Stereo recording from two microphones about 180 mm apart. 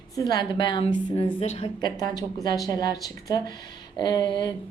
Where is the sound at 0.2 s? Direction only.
20° left (ahead or behind).